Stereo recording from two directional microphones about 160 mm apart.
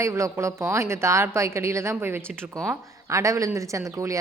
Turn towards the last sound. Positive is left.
turn(degrees=-20)  # may be behind; listen again after turning